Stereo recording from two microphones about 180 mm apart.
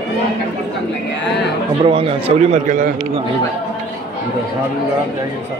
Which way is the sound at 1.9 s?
30° right (ahead or behind).